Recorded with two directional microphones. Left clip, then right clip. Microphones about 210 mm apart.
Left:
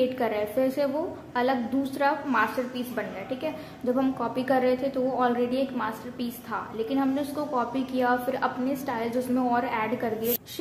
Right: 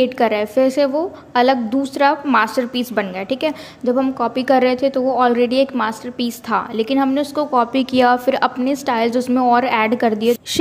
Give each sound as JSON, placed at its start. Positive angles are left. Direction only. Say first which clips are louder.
{"t": 0.0, "sound": "a woman's voice", "louder": "right 10 dB", "side_deg": -35}